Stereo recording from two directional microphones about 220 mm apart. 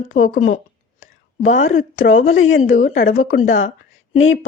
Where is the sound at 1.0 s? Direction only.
35° left (ahead or behind).